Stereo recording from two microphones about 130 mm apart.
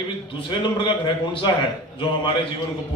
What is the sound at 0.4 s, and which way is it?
A man's voice, 40° left (ahead or behind).